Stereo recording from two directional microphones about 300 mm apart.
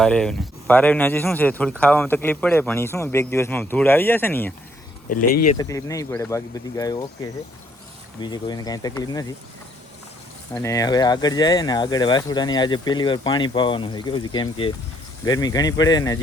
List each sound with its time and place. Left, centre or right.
0.0 s speech: centre
5.0 s speech: left
5.5 s speech: centre
8.2 s speech: centre
10.5 s speech: centre